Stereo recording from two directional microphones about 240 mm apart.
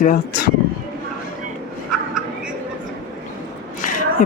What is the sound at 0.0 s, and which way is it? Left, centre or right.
Speech, left.